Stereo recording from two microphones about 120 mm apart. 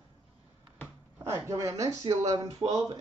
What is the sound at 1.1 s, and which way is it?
A woman's voice, 25° right (ahead or behind).